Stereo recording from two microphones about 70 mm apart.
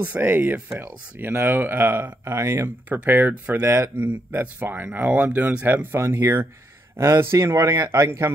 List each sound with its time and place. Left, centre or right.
0.0 s speech: right
2.2 s speech: right
2.9 s speech: right
3.6 s speech: right
4.0 s speech: right
5.9 s speech: right